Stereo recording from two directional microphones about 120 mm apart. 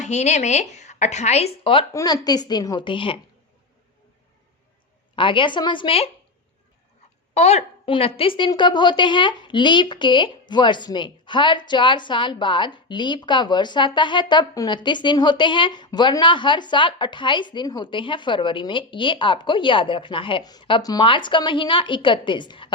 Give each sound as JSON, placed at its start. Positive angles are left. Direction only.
{"t": 0.0, "sound": "a woman's voice", "side_deg": 75}
{"t": 1.9, "sound": "a woman's voice", "side_deg": 25}
{"t": 5.1, "sound": "a woman's voice", "side_deg": 45}
{"t": 7.3, "sound": "a woman's voice", "side_deg": 65}
{"t": 7.9, "sound": "a woman's voice", "side_deg": 50}